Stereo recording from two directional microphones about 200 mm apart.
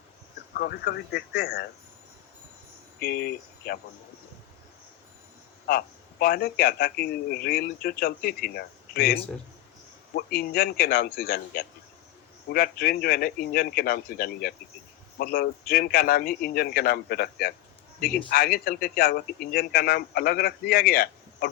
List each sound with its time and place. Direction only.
0.6 s a man's voice: 50° left (ahead or behind)
3.0 s speech: 50° left (ahead or behind)
5.6 s a man's voice: 50° left (ahead or behind)